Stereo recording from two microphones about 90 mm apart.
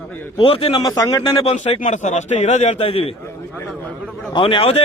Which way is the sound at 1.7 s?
90° left.